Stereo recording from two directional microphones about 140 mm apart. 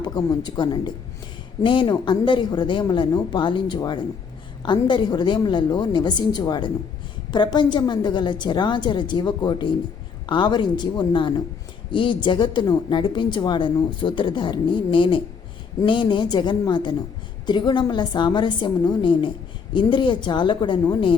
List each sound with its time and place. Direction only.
0.0 s a woman's voice: 30° left (ahead or behind)